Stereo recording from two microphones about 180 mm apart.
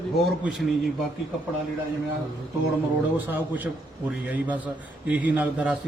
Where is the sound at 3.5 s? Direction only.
10° right (ahead or behind).